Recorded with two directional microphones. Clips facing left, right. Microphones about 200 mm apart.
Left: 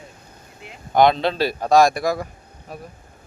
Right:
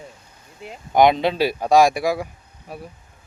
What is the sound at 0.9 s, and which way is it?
Speech, 15° right (ahead or behind).